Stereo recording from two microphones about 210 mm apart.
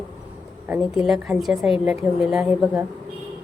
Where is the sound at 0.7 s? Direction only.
5° right (ahead or behind).